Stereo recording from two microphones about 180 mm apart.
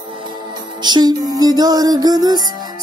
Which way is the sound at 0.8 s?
25° right (ahead or behind).